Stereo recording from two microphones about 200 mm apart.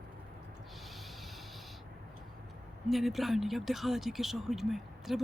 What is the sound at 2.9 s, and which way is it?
Speech, centre (ahead or behind).